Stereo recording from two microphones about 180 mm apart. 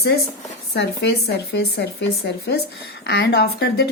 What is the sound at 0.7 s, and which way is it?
A woman's voice, 70° left (ahead or behind).